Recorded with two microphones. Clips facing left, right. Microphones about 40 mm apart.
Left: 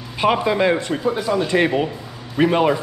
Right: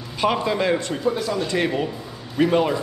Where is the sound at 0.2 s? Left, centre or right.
Centre.